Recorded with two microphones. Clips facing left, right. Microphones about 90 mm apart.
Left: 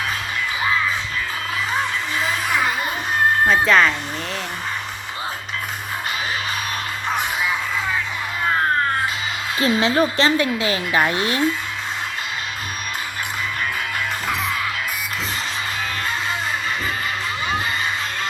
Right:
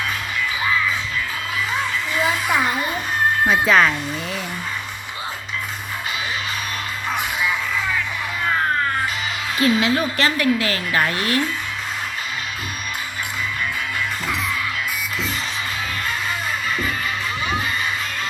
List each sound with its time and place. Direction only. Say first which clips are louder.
3.4 s speech: right 1 dB; 5° right (ahead or behind)
9.6 s speech: left 1 dB; 30° left (ahead or behind)